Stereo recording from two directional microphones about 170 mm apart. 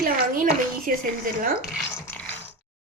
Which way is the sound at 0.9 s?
50° right (ahead or behind).